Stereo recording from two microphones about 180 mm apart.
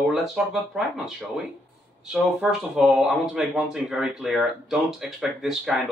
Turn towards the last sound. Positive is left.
turn(degrees=0)  # may be behind; listen again after turning